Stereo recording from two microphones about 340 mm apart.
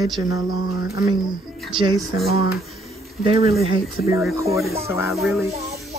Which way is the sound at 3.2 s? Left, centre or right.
Centre.